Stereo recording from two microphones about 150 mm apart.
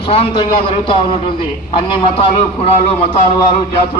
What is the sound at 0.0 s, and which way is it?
A man's voice, 35° left (ahead or behind).